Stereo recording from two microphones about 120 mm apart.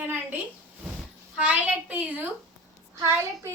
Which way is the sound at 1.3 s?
10° right (ahead or behind).